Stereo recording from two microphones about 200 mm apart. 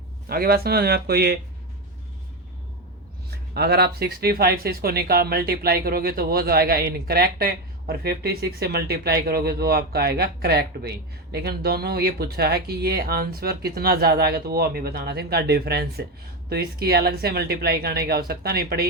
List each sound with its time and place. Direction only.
0.3 s speech: 50° right (ahead or behind)
3.2 s speech: 55° right (ahead or behind)